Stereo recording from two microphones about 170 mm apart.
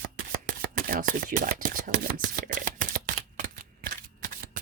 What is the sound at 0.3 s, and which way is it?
Shuffling cards, 60° right (ahead or behind).